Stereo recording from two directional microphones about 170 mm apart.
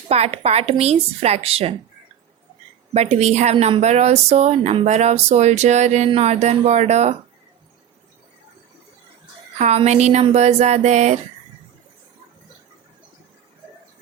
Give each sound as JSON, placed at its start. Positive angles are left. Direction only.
{"t": 0.1, "sound": "a woman's voice", "side_deg": -35}
{"t": 2.9, "sound": "a woman's voice", "side_deg": -40}
{"t": 9.6, "sound": "a woman's voice", "side_deg": -40}